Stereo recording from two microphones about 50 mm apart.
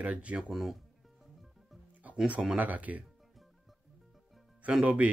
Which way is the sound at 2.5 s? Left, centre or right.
Right.